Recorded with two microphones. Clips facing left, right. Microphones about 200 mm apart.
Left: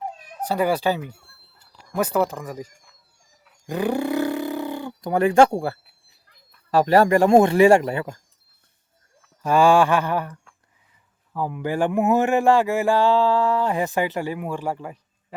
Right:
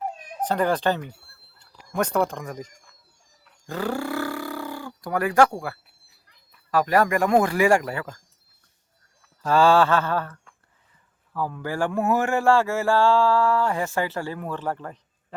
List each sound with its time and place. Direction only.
0.4 s speech: 10° left (ahead or behind)
3.7 s roar: 15° left (ahead or behind)
6.7 s speech: 30° left (ahead or behind)
9.4 s speech: 15° left (ahead or behind)